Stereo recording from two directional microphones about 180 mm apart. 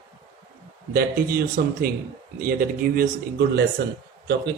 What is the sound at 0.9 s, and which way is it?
Speech, 55° right (ahead or behind).